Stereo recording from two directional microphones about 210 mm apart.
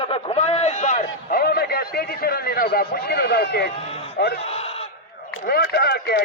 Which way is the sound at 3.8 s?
30° left (ahead or behind).